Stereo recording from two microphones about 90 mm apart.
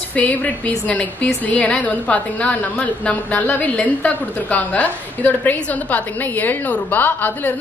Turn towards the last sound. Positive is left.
turn(degrees=20)  # may be behind; listen again after turning